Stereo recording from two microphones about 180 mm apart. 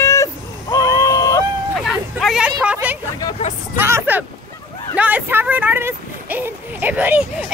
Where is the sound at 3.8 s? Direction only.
15° right (ahead or behind).